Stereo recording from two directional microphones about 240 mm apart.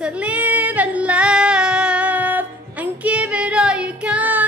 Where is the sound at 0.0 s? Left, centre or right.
Centre.